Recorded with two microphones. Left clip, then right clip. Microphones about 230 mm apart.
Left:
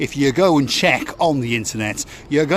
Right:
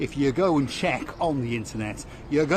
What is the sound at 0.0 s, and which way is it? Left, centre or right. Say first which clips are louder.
Speech: left 7 dB; left.